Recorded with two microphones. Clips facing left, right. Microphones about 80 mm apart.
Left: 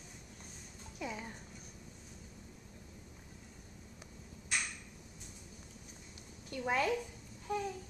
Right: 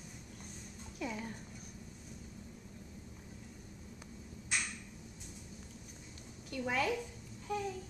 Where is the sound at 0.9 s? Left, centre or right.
Centre.